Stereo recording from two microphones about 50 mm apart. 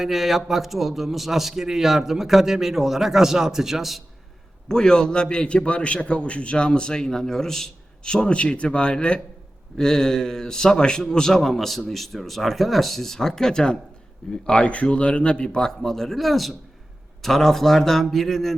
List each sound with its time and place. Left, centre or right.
0.0 s a man's voice: centre
4.7 s a man's voice: centre